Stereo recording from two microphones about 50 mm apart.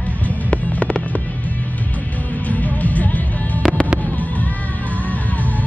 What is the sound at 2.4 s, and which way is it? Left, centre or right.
Music, left.